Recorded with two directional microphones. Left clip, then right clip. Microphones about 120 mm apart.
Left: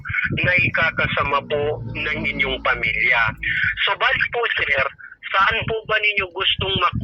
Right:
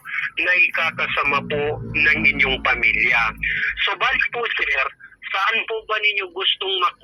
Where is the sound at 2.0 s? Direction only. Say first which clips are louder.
Right 7 dB; 60° right (ahead or behind).